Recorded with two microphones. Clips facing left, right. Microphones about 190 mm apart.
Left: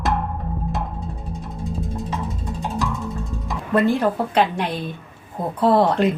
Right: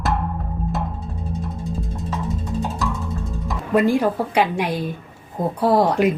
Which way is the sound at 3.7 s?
10° right (ahead or behind).